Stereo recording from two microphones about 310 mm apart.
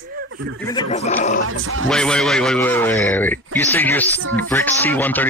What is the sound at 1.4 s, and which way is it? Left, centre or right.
Speech, right.